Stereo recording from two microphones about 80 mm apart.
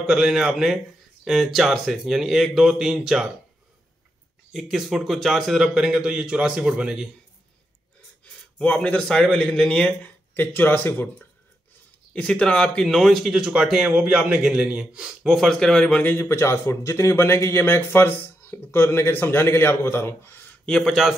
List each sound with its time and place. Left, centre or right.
0.0 s a man's voice: centre
4.5 s a man's voice: centre
8.5 s a man's voice: centre
10.3 s speech: left
12.1 s a man's voice: centre
15.3 s a man's voice: centre
16.0 s a man's voice: left
20.6 s a man's voice: centre